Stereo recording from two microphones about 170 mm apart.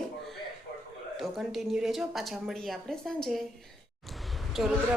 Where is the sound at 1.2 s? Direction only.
Centre (ahead or behind).